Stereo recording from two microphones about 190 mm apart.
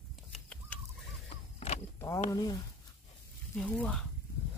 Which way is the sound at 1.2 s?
35° left (ahead or behind).